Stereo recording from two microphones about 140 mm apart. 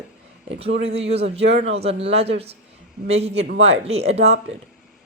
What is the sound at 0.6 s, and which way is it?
A woman's voice, 45° right (ahead or behind).